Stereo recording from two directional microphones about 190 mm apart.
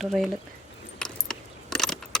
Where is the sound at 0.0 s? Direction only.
Centre (ahead or behind).